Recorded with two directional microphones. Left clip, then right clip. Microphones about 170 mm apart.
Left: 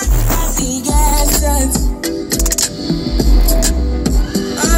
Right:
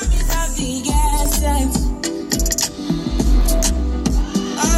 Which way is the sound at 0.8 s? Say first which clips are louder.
Left 4 dB; 30° left (ahead or behind).